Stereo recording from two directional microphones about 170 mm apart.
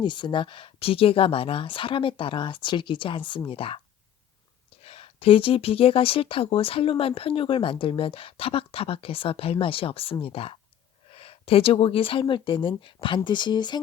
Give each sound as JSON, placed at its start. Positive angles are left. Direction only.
{"t": 0.0, "sound": "speech", "side_deg": 25}
{"t": 4.8, "sound": "speech", "side_deg": 35}